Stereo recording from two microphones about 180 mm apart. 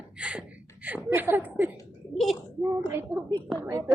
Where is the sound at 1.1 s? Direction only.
10° right (ahead or behind).